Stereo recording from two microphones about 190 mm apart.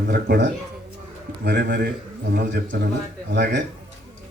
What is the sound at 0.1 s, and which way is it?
Speech, 60° right (ahead or behind).